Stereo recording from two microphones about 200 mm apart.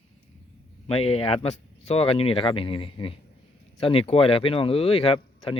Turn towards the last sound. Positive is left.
turn(degrees=25)  # may be behind; listen again after turning